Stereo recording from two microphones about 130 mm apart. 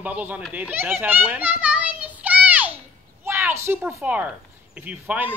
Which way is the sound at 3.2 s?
20° right (ahead or behind).